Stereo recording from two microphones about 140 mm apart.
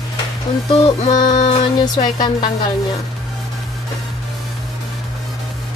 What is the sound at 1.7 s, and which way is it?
Speech, 30° left (ahead or behind).